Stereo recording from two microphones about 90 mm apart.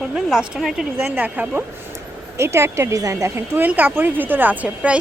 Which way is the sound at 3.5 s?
20° right (ahead or behind).